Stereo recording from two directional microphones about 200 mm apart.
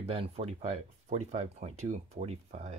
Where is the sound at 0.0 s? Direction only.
30° right (ahead or behind).